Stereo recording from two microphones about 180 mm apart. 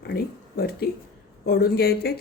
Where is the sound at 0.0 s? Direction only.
60° left (ahead or behind).